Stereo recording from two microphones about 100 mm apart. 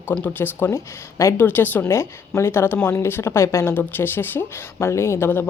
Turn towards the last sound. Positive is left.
turn(degrees=20)  # may be behind; listen again after turning